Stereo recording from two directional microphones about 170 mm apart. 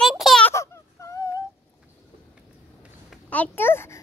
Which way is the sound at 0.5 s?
15° left (ahead or behind).